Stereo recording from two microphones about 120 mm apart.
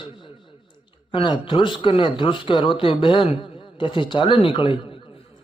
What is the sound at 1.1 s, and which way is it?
A man's voice, 45° left (ahead or behind).